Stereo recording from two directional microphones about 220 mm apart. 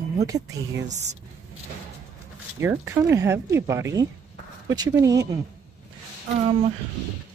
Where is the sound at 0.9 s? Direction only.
30° right (ahead or behind).